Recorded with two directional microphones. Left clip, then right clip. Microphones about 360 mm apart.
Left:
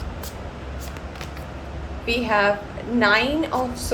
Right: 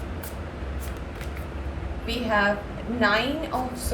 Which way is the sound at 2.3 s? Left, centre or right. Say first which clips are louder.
Left 2 dB; left.